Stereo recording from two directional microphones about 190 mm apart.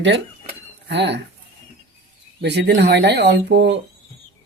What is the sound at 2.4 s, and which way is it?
Speech, 60° right (ahead or behind).